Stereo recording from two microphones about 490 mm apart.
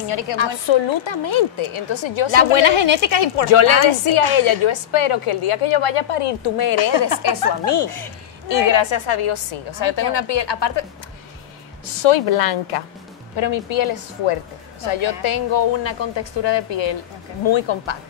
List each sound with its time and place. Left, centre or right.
0.1 s a woman's voice: left
7.2 s a woman's voice: left
7.8 s a woman's voice: left
12.0 s a woman's voice: left
13.4 s a woman's voice: left